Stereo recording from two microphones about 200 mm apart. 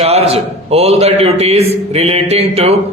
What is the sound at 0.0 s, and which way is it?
A man's voice, 30° right (ahead or behind).